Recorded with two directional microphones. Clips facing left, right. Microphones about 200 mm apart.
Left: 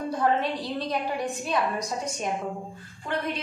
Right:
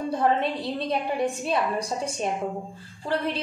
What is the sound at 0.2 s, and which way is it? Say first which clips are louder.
A woman's voice: right 1 dB; 25° right (ahead or behind).